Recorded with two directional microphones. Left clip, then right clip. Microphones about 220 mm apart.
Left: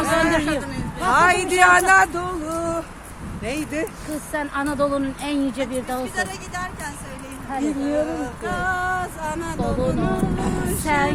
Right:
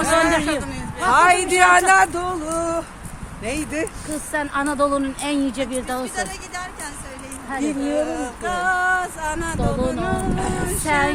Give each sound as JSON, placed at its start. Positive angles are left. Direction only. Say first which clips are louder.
{"t": 0.1, "sound": "a sound", "louder": "right 2 dB", "side_deg": 5}
{"t": 0.6, "sound": "a man's voice", "louder": "right 2 dB", "side_deg": -10}
{"t": 3.4, "sound": "speech", "louder": "right 1 dB", "side_deg": 0}
{"t": 7.8, "sound": "speech", "louder": "right 1 dB", "side_deg": -25}
{"t": 10.8, "sound": "speech", "louder": "right 1 dB", "side_deg": 5}